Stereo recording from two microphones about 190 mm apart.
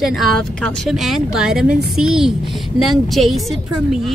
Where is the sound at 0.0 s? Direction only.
Centre (ahead or behind).